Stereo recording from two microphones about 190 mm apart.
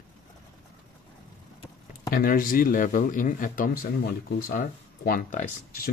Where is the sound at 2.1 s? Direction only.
50° left (ahead or behind).